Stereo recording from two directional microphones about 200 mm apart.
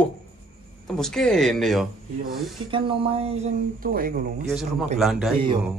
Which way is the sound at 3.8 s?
45° right (ahead or behind).